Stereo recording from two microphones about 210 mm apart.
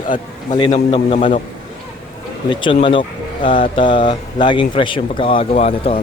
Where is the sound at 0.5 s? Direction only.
25° left (ahead or behind).